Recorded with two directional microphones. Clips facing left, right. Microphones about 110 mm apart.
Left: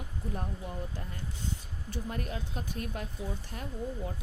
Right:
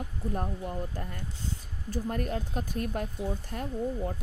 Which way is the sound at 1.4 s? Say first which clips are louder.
Right 2 dB; 45° right (ahead or behind).